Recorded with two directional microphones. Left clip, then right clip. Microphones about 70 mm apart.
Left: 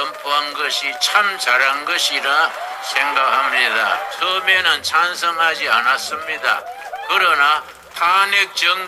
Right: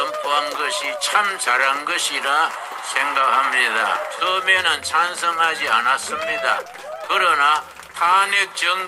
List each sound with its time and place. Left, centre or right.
0.0 s a man's voice: left